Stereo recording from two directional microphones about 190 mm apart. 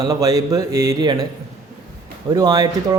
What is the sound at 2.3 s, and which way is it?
Speech, 20° right (ahead or behind).